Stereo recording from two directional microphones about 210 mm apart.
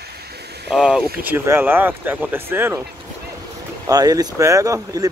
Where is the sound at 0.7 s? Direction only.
Centre (ahead or behind).